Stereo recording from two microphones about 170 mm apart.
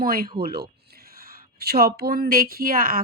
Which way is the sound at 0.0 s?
60° right (ahead or behind).